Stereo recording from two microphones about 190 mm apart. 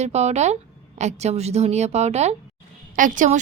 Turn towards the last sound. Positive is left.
turn(degrees=-40)  # may be behind; listen again after turning